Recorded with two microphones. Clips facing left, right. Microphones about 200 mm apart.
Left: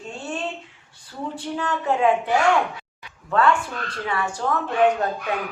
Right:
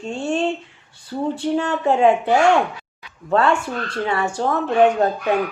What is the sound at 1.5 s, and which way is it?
A woman's voice, 30° right (ahead or behind).